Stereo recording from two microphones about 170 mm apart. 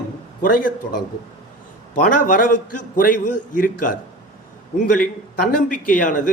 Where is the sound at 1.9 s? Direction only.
55° left (ahead or behind).